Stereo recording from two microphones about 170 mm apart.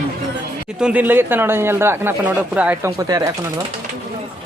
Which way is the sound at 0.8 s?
5° right (ahead or behind).